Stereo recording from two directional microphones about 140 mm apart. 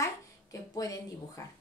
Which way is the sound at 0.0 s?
25° left (ahead or behind).